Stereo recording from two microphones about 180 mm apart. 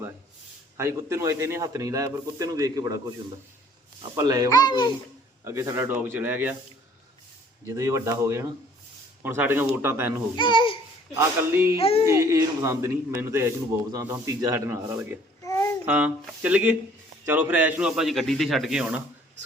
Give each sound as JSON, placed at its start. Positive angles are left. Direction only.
{"t": 0.8, "sound": "a man's voice", "side_deg": -15}
{"t": 4.1, "sound": "speech", "side_deg": -20}
{"t": 4.4, "sound": "speech", "side_deg": 20}
{"t": 5.5, "sound": "a man's voice", "side_deg": -15}
{"t": 7.7, "sound": "a man's voice", "side_deg": -15}
{"t": 10.3, "sound": "speech", "side_deg": 25}
{"t": 11.2, "sound": "a man's voice", "side_deg": -15}
{"t": 11.8, "sound": "child singing", "side_deg": 35}
{"t": 12.0, "sound": "a man's voice", "side_deg": -15}
{"t": 15.4, "sound": "babbling", "side_deg": 15}
{"t": 15.9, "sound": "a man's voice", "side_deg": -10}